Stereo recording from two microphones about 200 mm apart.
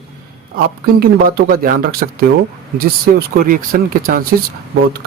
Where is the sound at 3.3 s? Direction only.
45° right (ahead or behind).